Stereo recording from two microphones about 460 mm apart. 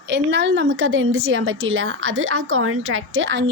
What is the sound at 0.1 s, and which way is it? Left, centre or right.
Speech, right.